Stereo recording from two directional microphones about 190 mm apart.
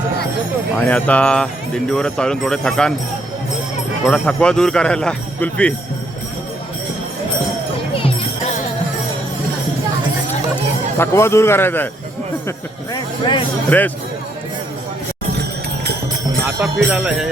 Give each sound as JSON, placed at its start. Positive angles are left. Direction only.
{"t": 0.9, "sound": "speech", "side_deg": 5}
{"t": 4.0, "sound": "speech", "side_deg": 5}
{"t": 10.9, "sound": "a man's voice", "side_deg": 15}
{"t": 12.5, "sound": "speech", "side_deg": 20}
{"t": 13.7, "sound": "a man's voice", "side_deg": 10}
{"t": 15.3, "sound": "music", "side_deg": -60}
{"t": 16.4, "sound": "speech", "side_deg": -10}